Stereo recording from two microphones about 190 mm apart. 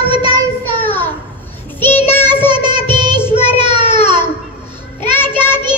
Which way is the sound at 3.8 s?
35° left (ahead or behind).